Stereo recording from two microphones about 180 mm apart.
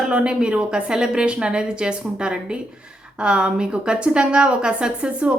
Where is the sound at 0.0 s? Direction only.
5° right (ahead or behind).